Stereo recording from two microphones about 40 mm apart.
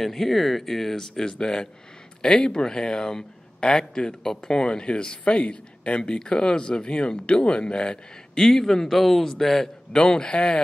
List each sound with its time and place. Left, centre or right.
0.0 s a man's voice: centre; by 10.6 s left